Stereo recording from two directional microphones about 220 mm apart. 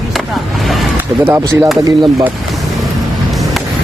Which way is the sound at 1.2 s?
10° right (ahead or behind).